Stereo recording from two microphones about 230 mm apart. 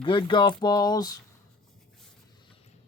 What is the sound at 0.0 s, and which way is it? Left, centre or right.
Speech, left.